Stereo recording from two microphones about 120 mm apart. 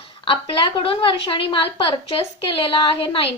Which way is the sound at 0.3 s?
45° left (ahead or behind).